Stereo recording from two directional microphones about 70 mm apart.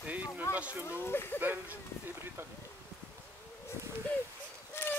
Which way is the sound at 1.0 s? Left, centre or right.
Left.